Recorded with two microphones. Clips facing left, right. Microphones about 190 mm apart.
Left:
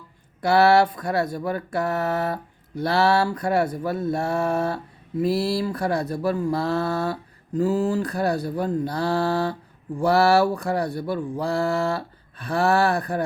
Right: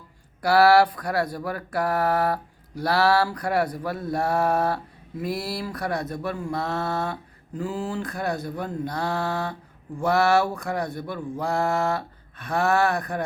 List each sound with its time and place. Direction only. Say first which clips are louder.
0.4 s speech: even; 25° left (ahead or behind)